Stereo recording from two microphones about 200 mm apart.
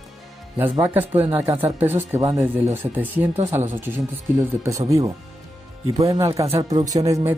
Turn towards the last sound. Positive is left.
turn(degrees=-15)  # may be behind; listen again after turning